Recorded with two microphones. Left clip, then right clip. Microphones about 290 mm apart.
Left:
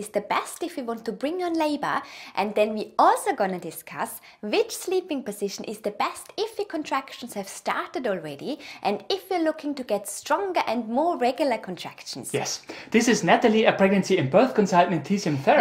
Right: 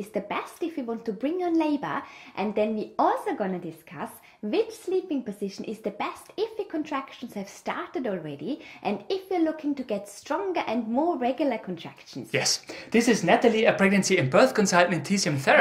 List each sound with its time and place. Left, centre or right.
0.1 s a woman's voice: left
12.3 s speech: right
12.6 s speech: centre; by 15.5 s right